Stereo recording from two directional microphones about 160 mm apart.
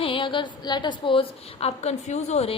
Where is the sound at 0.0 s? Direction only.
30° left (ahead or behind).